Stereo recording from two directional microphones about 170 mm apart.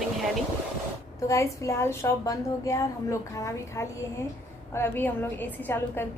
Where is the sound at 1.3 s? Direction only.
15° left (ahead or behind).